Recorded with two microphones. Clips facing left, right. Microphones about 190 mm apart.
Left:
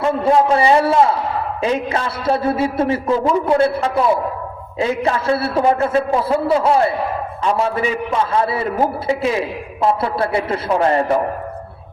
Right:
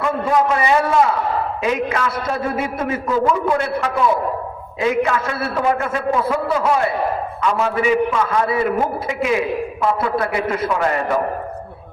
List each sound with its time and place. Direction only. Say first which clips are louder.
0.0 s a man's voice: left 3 dB; 30° left (ahead or behind)